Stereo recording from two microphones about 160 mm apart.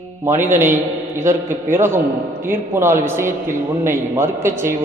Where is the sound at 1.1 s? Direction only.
15° right (ahead or behind).